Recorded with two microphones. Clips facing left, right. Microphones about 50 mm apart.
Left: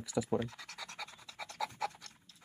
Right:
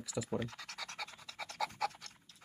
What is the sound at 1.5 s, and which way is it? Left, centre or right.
Pant, centre.